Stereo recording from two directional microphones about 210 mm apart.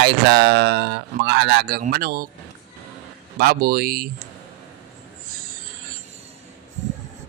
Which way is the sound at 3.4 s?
45° right (ahead or behind).